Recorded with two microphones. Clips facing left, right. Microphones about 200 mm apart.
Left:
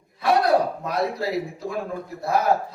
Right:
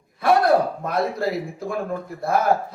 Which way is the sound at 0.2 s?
50° right (ahead or behind).